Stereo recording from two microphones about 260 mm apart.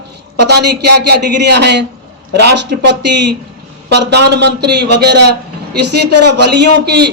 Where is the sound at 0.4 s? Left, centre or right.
Right.